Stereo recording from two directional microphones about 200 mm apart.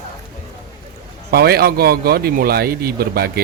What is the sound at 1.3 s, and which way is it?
Speech, 50° right (ahead or behind).